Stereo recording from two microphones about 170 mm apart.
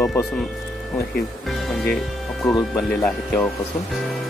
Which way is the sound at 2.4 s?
20° left (ahead or behind).